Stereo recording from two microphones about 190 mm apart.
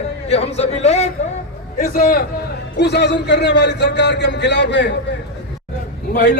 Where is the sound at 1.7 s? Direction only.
50° left (ahead or behind).